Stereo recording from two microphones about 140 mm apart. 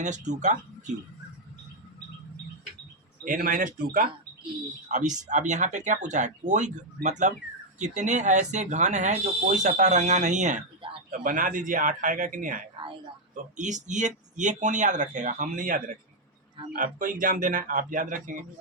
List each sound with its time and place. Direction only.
0.0 s speech: 60° right (ahead or behind)
3.2 s speech: 80° right
4.9 s speech: 60° right (ahead or behind)
11.1 s speech: 70° right (ahead or behind)
13.3 s speech: 60° right (ahead or behind)